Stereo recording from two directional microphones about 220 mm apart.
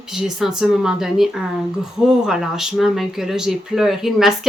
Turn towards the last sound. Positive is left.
turn(degrees=0)  # may be behind; listen again after turning